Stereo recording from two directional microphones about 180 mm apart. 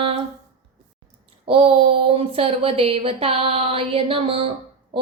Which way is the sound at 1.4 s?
30° right (ahead or behind).